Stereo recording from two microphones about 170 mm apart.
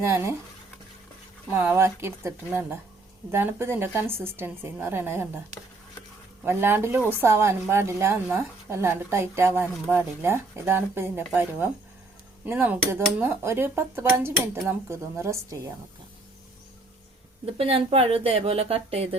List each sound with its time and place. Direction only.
0.0 s speech: 15° right (ahead or behind)
1.5 s speech: 10° right (ahead or behind)
6.4 s speech: 15° right (ahead or behind)
12.5 s speech: 15° right (ahead or behind)
17.4 s a woman's voice: 35° right (ahead or behind)